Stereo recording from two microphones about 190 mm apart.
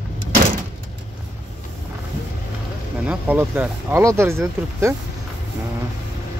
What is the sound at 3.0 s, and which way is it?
Speech, 10° right (ahead or behind).